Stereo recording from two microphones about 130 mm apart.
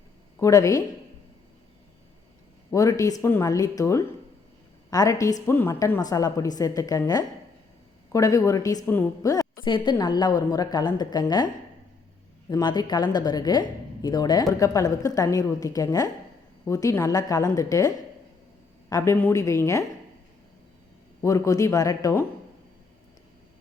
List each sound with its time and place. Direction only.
0.3 s speech: 25° left (ahead or behind)
2.6 s speech: 25° left (ahead or behind)
9.6 s a woman's voice: 35° left (ahead or behind)
21.2 s speech: 25° left (ahead or behind)